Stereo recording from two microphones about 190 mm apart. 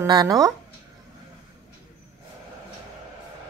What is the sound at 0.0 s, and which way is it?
Speech, 20° right (ahead or behind).